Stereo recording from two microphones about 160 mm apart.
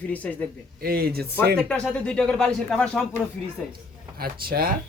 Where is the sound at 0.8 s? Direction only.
70° right (ahead or behind).